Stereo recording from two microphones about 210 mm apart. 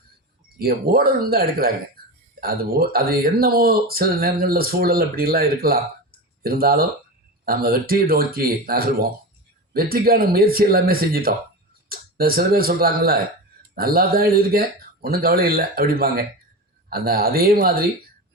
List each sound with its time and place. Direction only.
0.4 s speech: 45° right (ahead or behind)